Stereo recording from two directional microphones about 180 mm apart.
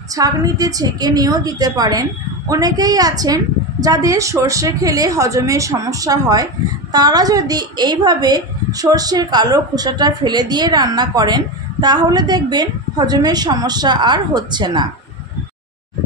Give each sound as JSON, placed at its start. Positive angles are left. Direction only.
{"t": 0.1, "sound": "a woman's voice", "side_deg": -20}